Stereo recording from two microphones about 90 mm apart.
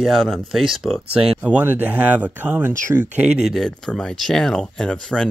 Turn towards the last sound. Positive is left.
turn(degrees=10)  # may be behind; listen again after turning